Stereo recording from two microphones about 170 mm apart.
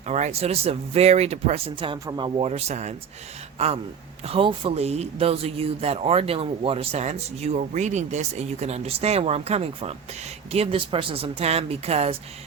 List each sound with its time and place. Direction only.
0.0 s speech: 40° right (ahead or behind)
2.5 s speech: 40° right (ahead or behind)